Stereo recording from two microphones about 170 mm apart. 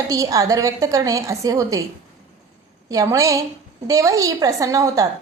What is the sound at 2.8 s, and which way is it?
A woman's voice, 20° right (ahead or behind).